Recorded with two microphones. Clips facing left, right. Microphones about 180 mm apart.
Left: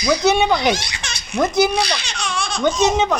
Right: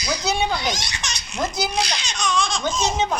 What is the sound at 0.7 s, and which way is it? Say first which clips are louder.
Baby laughter: left 2 dB; 10° left (ahead or behind).